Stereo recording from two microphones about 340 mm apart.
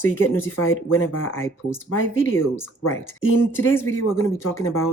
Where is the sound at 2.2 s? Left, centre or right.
Centre.